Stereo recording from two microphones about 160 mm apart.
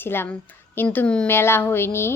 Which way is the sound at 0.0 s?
15° left (ahead or behind).